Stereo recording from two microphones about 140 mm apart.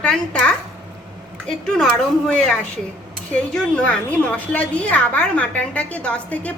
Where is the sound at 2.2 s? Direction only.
5° left (ahead or behind).